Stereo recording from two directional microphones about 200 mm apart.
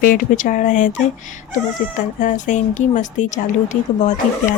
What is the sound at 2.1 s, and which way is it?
Speech, 40° left (ahead or behind).